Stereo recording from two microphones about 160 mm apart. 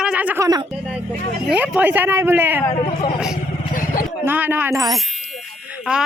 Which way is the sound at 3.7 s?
60° left (ahead or behind).